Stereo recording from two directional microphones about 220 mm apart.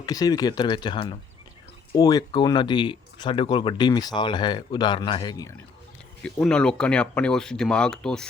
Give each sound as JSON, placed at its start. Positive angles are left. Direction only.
{"t": 0.0, "sound": "speech", "side_deg": 15}
{"t": 6.2, "sound": "speech", "side_deg": 5}